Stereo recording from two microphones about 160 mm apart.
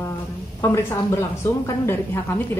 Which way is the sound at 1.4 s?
15° left (ahead or behind).